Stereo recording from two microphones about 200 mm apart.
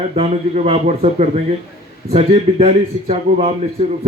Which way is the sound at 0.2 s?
30° right (ahead or behind).